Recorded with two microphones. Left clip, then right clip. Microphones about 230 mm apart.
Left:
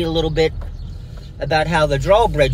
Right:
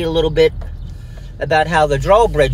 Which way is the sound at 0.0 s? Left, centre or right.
Right.